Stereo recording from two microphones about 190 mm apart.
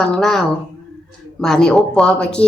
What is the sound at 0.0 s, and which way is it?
A woman's voice, 5° left (ahead or behind).